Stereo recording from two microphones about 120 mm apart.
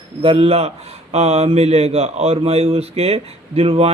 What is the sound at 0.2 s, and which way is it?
Speech, 45° right (ahead or behind).